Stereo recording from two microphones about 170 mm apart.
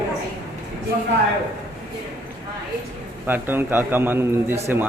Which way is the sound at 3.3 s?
10° right (ahead or behind).